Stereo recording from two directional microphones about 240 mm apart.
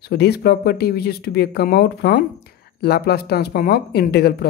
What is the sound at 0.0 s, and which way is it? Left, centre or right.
Speech, left.